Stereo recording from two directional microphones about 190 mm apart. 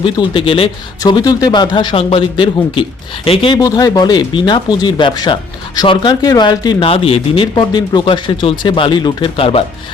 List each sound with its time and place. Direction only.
0.0 s speech: 25° left (ahead or behind)